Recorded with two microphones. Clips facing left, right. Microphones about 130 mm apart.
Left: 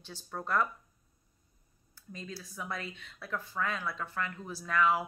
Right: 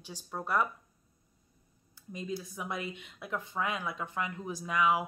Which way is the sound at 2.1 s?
15° right (ahead or behind).